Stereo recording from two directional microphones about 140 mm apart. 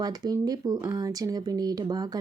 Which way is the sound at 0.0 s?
30° right (ahead or behind).